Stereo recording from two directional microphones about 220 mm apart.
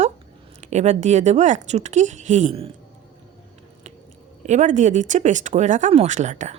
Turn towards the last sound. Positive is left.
turn(degrees=-35)  # may be behind; listen again after turning